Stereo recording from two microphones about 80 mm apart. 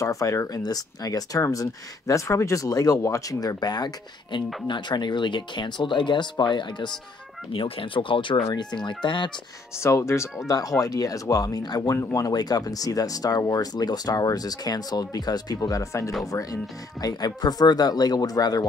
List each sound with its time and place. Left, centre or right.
0.0 s speech: left
7.5 s speech: left
9.8 s speech: left
10.8 s speech: left
11.9 s speech: left
17.0 s speech: left